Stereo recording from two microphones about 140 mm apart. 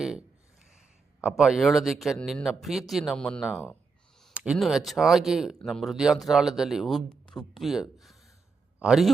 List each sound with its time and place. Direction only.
0.0 s a sound: 5° right (ahead or behind)
1.2 s speech: 5° right (ahead or behind)
4.5 s speech: centre (ahead or behind)